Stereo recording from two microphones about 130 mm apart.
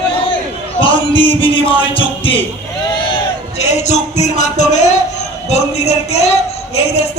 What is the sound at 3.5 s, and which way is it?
Music, 60° left (ahead or behind).